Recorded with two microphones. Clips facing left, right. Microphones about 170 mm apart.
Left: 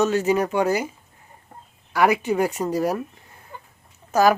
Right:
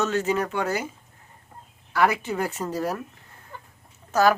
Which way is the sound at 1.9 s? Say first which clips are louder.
Left 3 dB; 15° left (ahead or behind).